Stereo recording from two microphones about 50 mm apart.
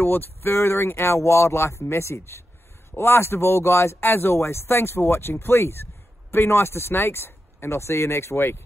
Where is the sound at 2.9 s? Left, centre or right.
Left.